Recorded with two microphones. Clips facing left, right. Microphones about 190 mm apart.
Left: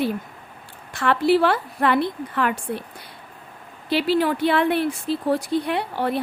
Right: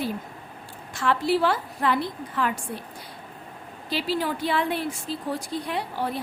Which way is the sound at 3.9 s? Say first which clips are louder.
Left 7 dB; 65° left (ahead or behind).